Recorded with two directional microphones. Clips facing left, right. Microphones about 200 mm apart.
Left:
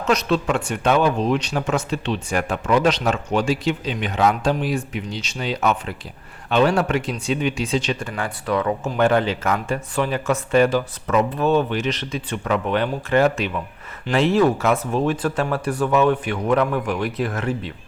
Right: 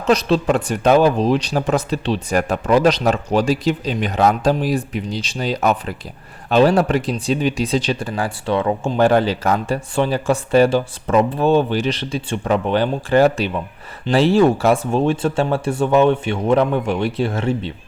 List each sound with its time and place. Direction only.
0.0 s speech: 30° right (ahead or behind)